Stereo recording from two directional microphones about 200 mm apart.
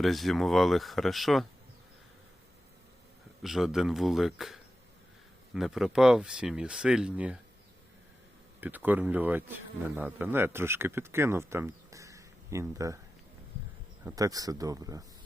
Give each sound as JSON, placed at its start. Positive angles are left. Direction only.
{"t": 0.0, "sound": "speech", "side_deg": 0}
{"t": 3.4, "sound": "speech", "side_deg": 0}
{"t": 8.6, "sound": "speech", "side_deg": -10}
{"t": 14.0, "sound": "speech", "side_deg": -15}